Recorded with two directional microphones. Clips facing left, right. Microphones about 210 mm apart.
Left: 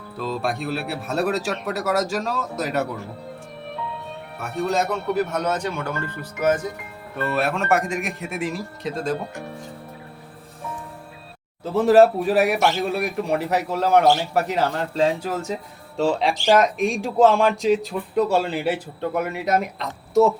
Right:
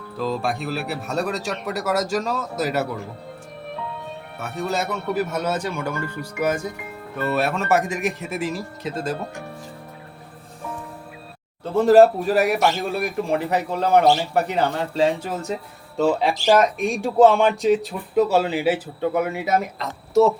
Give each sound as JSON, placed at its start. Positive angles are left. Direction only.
{"t": 0.4, "sound": "speech", "side_deg": 0}
{"t": 4.4, "sound": "speech", "side_deg": 0}
{"t": 7.3, "sound": "speech", "side_deg": 0}
{"t": 11.6, "sound": "speech", "side_deg": 0}